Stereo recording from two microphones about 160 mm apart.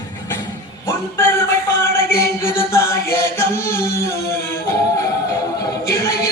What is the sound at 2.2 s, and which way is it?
Chant, 15° left (ahead or behind).